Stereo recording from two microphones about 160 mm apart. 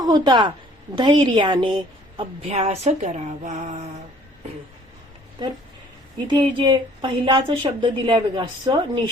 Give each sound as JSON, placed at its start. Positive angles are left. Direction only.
{"t": 0.0, "sound": "a woman's voice", "side_deg": -25}
{"t": 2.1, "sound": "speech", "side_deg": -40}
{"t": 6.1, "sound": "a woman's voice", "side_deg": -30}